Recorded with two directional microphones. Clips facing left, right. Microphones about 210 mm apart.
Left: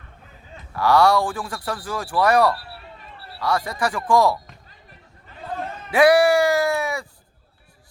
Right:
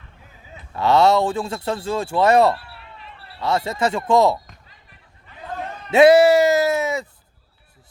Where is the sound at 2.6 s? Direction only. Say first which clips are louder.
Left 2 dB; 40° left (ahead or behind).